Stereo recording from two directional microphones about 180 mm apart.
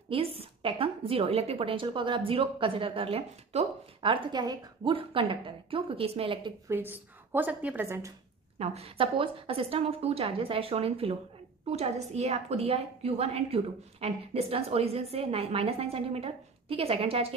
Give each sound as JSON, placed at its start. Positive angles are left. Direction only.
{"t": 0.1, "sound": "a woman's voice", "side_deg": -35}
{"t": 6.7, "sound": "a woman's voice", "side_deg": -10}
{"t": 8.5, "sound": "a woman's voice", "side_deg": -35}